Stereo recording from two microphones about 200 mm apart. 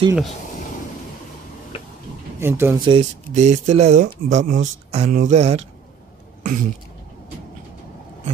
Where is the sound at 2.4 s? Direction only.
10° right (ahead or behind).